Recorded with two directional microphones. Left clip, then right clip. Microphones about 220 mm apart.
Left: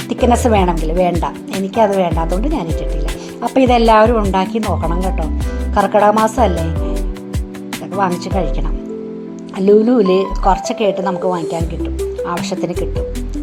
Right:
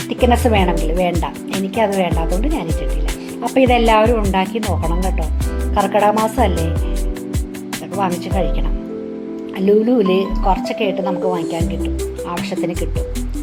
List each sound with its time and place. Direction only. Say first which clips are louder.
0.1 s speech: left 2 dB; 20° left (ahead or behind)
7.9 s speech: left 2 dB; 20° left (ahead or behind)
9.6 s speech: left 3 dB; 20° left (ahead or behind)